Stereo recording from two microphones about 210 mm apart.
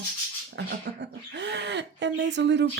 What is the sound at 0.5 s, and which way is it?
Speech, 55° right (ahead or behind).